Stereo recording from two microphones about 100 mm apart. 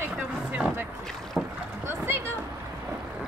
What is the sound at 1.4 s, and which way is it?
Boat, 10° right (ahead or behind).